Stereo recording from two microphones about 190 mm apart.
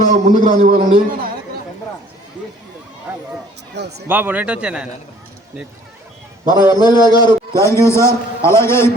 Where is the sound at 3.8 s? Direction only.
65° right (ahead or behind).